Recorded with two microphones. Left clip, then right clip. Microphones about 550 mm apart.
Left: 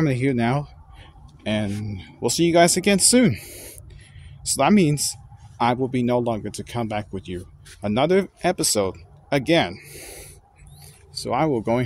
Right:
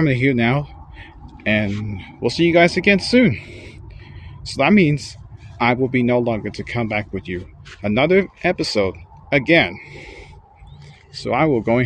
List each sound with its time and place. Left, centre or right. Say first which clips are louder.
0.0 s speech: right 5 dB; left